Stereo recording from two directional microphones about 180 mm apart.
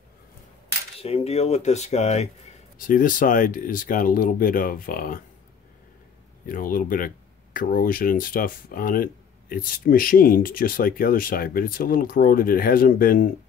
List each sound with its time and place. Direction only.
1.0 s speech: 35° left (ahead or behind); by 5.2 s 50° left (ahead or behind)
6.4 s speech: 50° left (ahead or behind)